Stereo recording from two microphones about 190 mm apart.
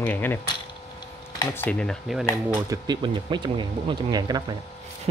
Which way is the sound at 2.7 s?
20° right (ahead or behind).